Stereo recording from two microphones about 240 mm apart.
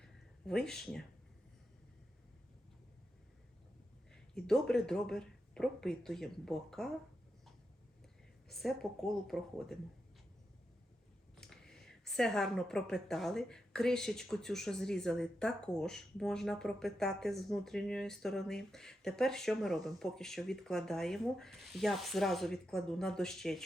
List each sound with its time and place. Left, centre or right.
0.0 s a sound: centre
4.1 s a woman's voice: centre
8.4 s a woman's voice: centre
11.3 s a woman's voice: centre